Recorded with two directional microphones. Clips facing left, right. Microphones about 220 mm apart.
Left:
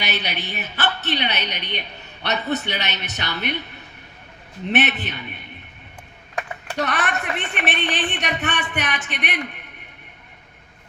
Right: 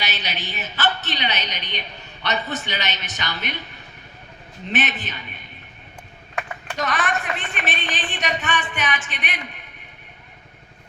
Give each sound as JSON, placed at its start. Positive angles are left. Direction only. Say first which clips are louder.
{"t": 0.0, "sound": "a woman's voice", "louder": "left 3 dB", "side_deg": 60}
{"t": 4.7, "sound": "speech", "louder": "left 4 dB", "side_deg": 65}
{"t": 6.7, "sound": "speech", "louder": "left 1 dB", "side_deg": 65}